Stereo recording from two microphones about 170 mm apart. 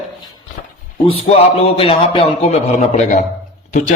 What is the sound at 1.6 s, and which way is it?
Speech, 35° left (ahead or behind).